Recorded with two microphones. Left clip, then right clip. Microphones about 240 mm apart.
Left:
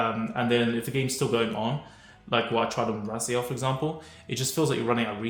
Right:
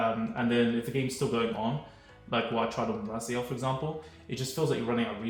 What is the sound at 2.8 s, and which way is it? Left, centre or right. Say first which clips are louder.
Speech: left 4 dB; left.